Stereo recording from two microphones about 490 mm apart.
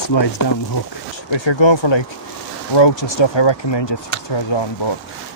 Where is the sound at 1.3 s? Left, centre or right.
Left.